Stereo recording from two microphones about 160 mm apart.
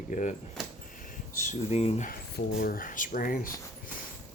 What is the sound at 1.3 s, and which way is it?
Speech, 50° left (ahead or behind).